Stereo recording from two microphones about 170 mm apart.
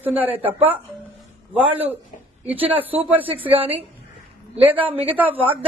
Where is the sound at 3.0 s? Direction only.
10° right (ahead or behind).